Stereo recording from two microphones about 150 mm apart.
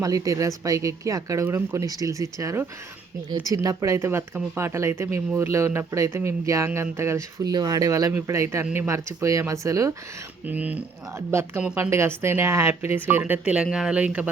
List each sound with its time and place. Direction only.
0.0 s a woman's voice: 25° right (ahead or behind)
8.9 s speech: 20° right (ahead or behind)
10.4 s a woman's voice: 10° right (ahead or behind)